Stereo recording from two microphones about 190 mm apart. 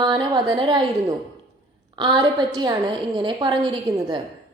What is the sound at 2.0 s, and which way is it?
A woman's voice, 25° right (ahead or behind).